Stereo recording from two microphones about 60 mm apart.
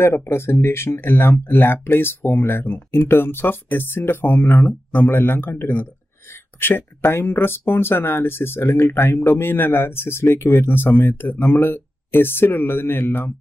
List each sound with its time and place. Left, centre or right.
0.0 s speech: left